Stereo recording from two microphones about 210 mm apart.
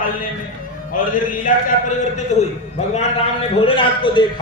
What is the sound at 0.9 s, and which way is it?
Mantra, 40° left (ahead or behind).